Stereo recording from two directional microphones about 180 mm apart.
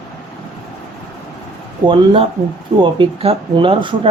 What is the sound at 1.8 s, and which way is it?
Speech, 25° right (ahead or behind).